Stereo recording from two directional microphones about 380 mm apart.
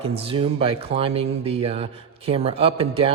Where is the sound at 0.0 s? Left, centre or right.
Centre.